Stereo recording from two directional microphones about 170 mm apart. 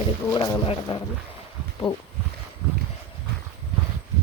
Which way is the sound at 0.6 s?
30° left (ahead or behind).